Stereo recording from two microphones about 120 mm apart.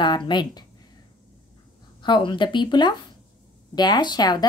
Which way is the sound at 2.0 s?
40° left (ahead or behind).